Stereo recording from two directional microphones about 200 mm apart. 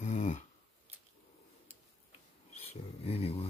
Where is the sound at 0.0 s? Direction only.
35° left (ahead or behind).